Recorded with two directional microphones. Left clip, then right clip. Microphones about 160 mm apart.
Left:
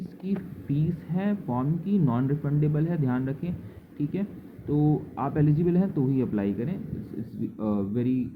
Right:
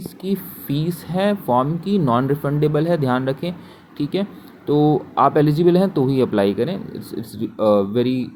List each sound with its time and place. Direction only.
0.0 s speech: 25° right (ahead or behind)